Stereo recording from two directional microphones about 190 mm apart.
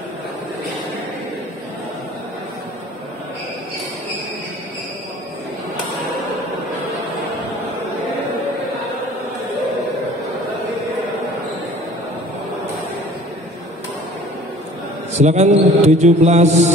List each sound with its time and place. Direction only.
15.1 s a man's voice: 35° right (ahead or behind)